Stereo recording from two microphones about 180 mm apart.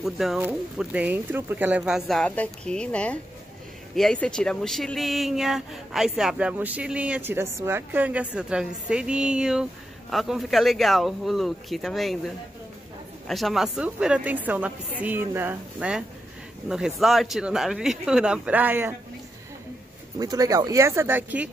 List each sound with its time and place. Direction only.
0.0 s speech: centre (ahead or behind)
13.3 s a woman's voice: centre (ahead or behind)
20.2 s a woman's voice: 20° right (ahead or behind)